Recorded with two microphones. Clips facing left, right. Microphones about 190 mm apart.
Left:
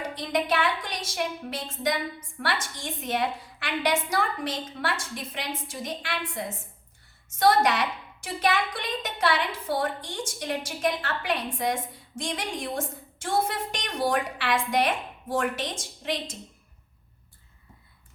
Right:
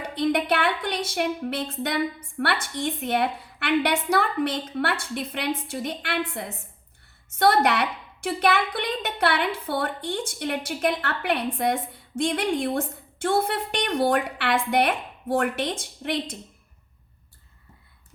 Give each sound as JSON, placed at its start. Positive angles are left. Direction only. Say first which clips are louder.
{"t": 0.1, "sound": "a woman's voice", "louder": "right 6 dB", "side_deg": -60}